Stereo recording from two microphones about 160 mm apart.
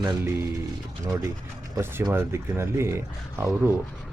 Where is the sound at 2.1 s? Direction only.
15° right (ahead or behind).